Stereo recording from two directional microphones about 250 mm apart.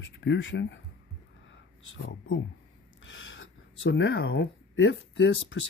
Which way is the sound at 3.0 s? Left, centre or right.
Left.